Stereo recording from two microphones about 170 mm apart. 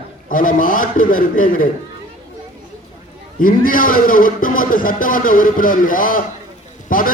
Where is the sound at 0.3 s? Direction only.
55° left (ahead or behind).